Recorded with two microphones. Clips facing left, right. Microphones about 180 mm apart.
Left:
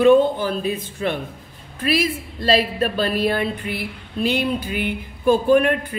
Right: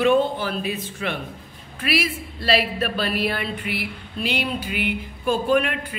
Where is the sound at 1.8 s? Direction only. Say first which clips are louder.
Left 4 dB; 40° left (ahead or behind).